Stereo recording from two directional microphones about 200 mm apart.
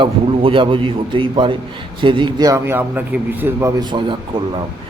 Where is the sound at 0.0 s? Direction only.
25° right (ahead or behind).